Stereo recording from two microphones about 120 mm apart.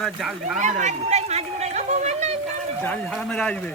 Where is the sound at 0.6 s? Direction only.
80° right.